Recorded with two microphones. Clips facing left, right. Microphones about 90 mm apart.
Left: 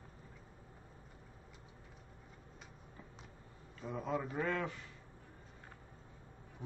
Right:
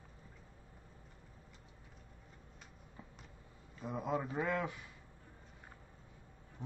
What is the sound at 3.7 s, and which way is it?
Speech, 10° right (ahead or behind).